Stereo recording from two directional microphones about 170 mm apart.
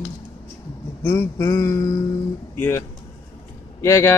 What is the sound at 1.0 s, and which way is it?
Speech, 15° left (ahead or behind).